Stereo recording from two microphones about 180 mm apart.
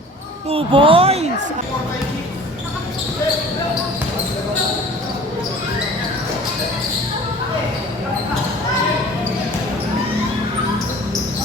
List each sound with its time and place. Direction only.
0.5 s speech: 30° right (ahead or behind)